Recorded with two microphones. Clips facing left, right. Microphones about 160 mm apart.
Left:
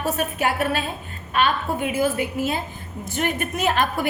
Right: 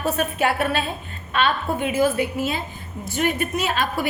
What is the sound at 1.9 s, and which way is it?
A woman's voice, 50° left (ahead or behind).